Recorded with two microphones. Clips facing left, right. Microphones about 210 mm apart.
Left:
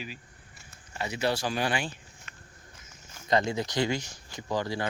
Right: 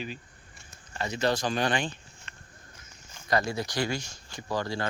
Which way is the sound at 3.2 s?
20° left (ahead or behind).